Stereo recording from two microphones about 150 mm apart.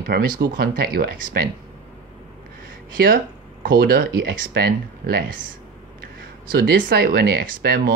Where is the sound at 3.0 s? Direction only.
80° right.